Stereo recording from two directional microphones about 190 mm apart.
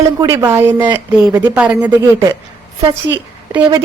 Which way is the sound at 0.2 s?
15° right (ahead or behind).